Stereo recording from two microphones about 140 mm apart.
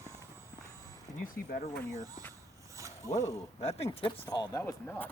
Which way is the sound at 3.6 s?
50° left (ahead or behind).